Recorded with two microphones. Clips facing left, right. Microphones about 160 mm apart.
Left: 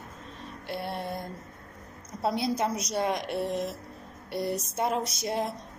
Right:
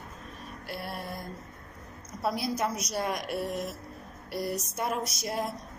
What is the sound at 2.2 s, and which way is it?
A woman's voice, 25° left (ahead or behind).